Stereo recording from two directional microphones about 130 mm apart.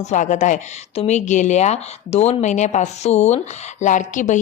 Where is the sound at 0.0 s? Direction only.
65° left (ahead or behind).